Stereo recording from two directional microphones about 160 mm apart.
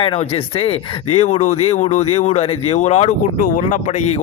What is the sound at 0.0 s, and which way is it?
Speech, 35° left (ahead or behind).